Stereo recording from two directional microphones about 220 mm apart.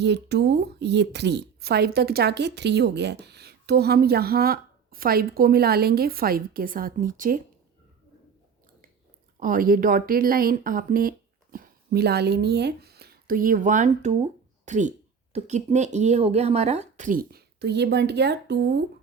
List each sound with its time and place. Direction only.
0.0 s speech: 50° right (ahead or behind)
9.4 s speech: 40° right (ahead or behind)